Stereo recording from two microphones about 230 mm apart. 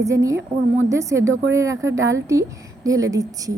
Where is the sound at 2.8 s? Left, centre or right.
Centre.